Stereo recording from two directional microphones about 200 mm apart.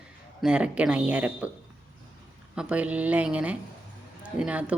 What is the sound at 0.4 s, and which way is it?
Speech, 5° right (ahead or behind).